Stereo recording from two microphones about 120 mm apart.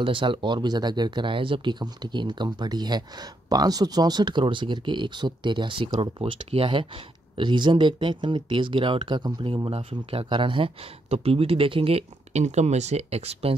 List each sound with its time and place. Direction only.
0.0 s speech: 45° right (ahead or behind)